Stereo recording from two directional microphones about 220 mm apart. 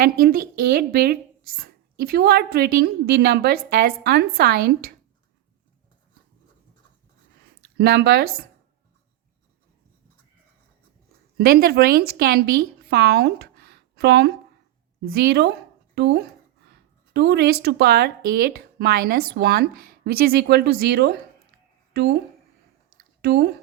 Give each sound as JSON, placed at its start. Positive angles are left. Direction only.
{"t": 0.0, "sound": "speech", "side_deg": -45}
{"t": 7.8, "sound": "speech", "side_deg": -45}
{"t": 11.3, "sound": "a woman's voice", "side_deg": -45}
{"t": 23.2, "sound": "speech", "side_deg": -45}